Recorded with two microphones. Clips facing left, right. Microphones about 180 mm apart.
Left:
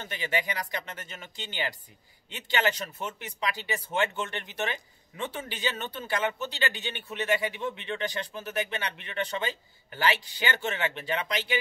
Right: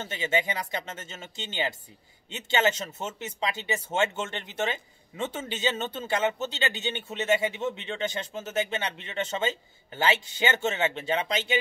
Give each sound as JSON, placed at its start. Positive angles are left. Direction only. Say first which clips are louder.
{"t": 0.0, "sound": "speech", "louder": "right 3 dB", "side_deg": -25}